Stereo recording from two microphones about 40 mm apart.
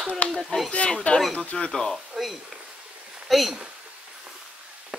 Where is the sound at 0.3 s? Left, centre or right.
Centre.